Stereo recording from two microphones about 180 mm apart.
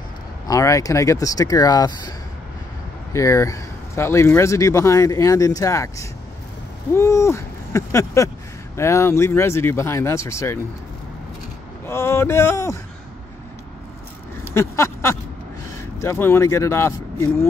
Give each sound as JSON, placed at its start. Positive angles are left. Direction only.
{"t": 0.5, "sound": "speech", "side_deg": 20}
{"t": 11.8, "sound": "speech", "side_deg": 15}
{"t": 14.4, "sound": "a sound", "side_deg": 15}
{"t": 16.0, "sound": "speech", "side_deg": 15}